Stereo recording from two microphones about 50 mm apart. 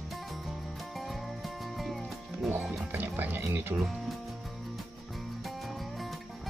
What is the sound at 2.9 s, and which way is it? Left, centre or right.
Music, right.